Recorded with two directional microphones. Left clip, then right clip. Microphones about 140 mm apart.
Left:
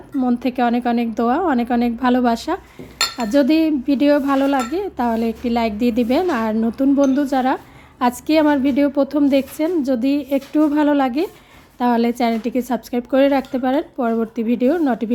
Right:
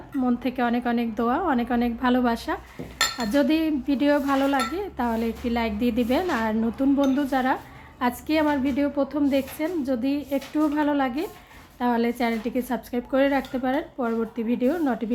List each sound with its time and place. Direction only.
0.2 s speech: 30° left (ahead or behind)